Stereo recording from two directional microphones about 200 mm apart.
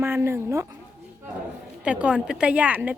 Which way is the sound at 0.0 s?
10° right (ahead or behind).